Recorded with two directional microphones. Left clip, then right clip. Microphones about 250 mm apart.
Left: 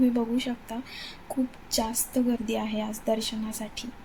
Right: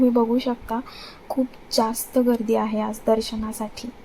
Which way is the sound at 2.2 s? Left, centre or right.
Centre.